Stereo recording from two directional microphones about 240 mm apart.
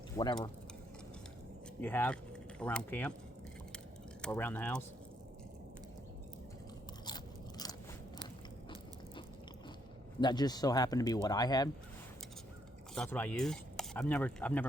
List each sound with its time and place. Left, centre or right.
0.2 s speech: centre
1.8 s speech: centre
4.2 s speech: centre
10.2 s speech: centre
12.9 s speech: centre